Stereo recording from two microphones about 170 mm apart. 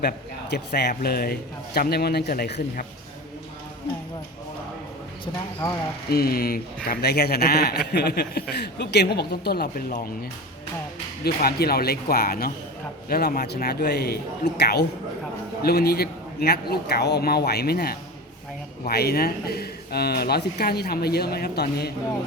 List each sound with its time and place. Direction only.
0.5 s a man's voice: 75° left (ahead or behind)
5.2 s speech: 25° left (ahead or behind)
6.1 s a man's voice: 65° left (ahead or behind)
11.2 s a man's voice: 70° left (ahead or behind)